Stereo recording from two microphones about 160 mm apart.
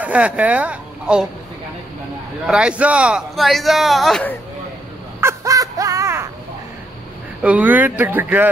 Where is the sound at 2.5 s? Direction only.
5° right (ahead or behind).